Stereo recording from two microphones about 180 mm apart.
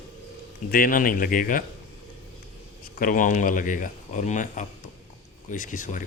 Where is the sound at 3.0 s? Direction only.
50° left (ahead or behind).